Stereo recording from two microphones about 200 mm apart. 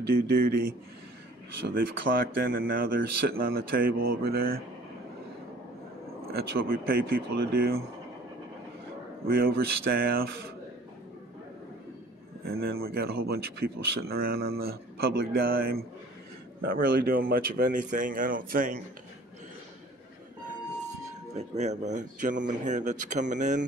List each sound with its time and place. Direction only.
0.1 s speech: 50° right (ahead or behind)
2.1 s speech: 45° right (ahead or behind)
6.3 s speech: 45° right (ahead or behind)
9.3 s speech: 50° right (ahead or behind)
12.4 s speech: 50° right (ahead or behind)
21.3 s speech: 35° right (ahead or behind)